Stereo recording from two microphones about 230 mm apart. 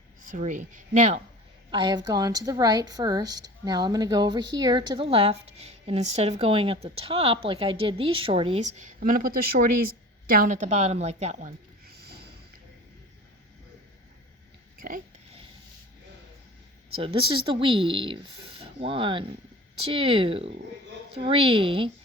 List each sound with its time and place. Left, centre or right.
0.2 s speech: right
1.7 s speech: centre; by 12.3 s right
14.8 s a sound: right
17.0 s speech: right